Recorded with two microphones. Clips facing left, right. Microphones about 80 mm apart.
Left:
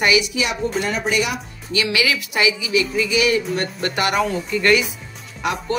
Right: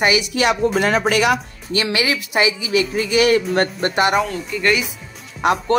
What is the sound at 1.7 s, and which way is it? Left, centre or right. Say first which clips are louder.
Speech: right 1 dB; right.